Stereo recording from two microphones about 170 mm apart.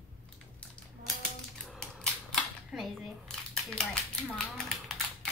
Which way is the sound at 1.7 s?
Centre (ahead or behind).